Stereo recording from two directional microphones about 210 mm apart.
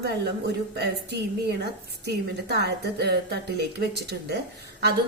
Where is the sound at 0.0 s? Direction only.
50° right (ahead or behind).